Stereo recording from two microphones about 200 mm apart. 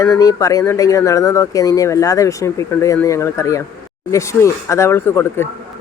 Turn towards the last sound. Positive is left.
turn(degrees=10)  # may be behind; listen again after turning